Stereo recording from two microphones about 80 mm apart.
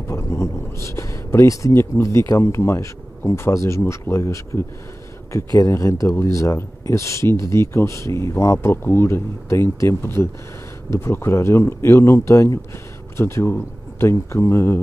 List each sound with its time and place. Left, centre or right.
0.1 s speech: left